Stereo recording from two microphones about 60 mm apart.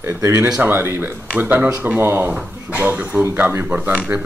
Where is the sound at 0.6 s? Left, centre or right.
Right.